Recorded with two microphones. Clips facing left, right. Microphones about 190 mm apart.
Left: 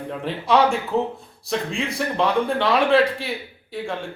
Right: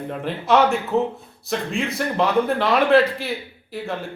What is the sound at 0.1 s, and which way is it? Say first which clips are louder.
A man's voice: right 1 dB; centre (ahead or behind).